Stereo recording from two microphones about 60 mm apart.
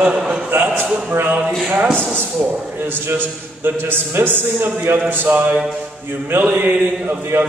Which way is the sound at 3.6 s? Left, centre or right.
Right.